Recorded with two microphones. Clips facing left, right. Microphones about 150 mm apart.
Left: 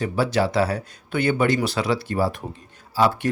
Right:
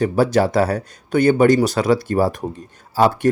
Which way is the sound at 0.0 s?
45° right (ahead or behind).